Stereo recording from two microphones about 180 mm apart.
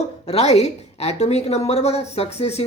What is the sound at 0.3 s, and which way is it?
Speech, 35° left (ahead or behind).